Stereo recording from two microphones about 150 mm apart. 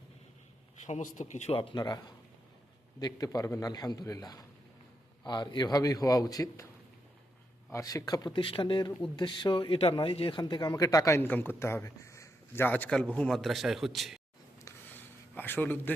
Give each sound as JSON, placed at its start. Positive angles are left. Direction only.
{"t": 0.9, "sound": "speech", "side_deg": 55}
{"t": 1.7, "sound": "speech", "side_deg": 30}
{"t": 7.7, "sound": "speech", "side_deg": 20}
{"t": 14.6, "sound": "a sound", "side_deg": 10}